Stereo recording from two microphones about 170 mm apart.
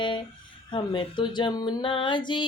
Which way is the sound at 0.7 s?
30° left (ahead or behind).